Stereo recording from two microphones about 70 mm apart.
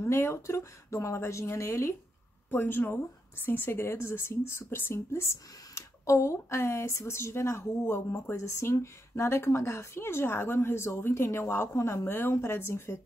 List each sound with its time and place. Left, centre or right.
0.0 s speech: left
2.5 s speech: left